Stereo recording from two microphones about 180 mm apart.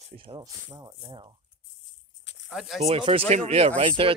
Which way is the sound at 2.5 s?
Centre (ahead or behind).